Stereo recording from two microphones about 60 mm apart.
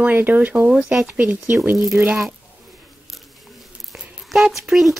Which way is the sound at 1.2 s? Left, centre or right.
Right.